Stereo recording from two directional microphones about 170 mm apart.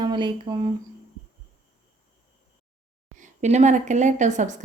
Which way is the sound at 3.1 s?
45° right (ahead or behind).